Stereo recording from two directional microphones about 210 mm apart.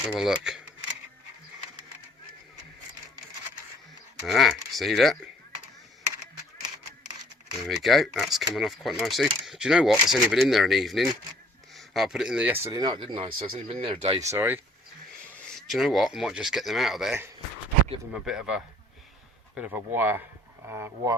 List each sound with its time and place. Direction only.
0.1 s speech: centre (ahead or behind)
4.3 s speech: centre (ahead or behind)
7.8 s speech: centre (ahead or behind); by 14.3 s 25° right (ahead or behind)
14.3 s speech: 10° right (ahead or behind)
15.4 s speech: centre (ahead or behind)